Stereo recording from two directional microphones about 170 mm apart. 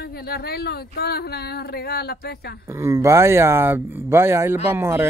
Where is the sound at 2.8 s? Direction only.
20° right (ahead or behind).